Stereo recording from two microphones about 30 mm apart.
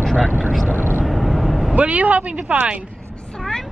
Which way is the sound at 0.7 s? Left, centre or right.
Left.